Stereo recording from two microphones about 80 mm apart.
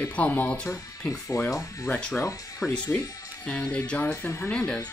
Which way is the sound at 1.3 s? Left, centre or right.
Left.